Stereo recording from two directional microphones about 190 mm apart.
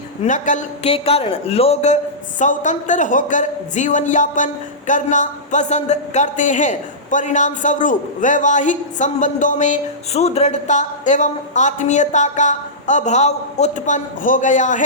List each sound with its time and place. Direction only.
0.3 s speech: 40° left (ahead or behind)